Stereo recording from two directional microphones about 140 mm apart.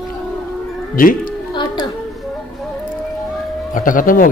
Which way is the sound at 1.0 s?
80° left.